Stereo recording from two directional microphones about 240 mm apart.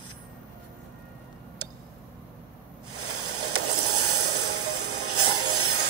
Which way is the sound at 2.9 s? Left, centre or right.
Right.